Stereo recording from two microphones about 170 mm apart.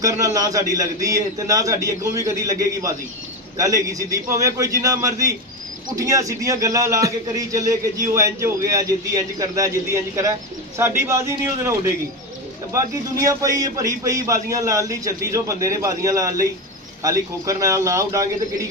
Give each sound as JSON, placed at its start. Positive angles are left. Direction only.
{"t": 0.0, "sound": "a man's voice", "side_deg": -20}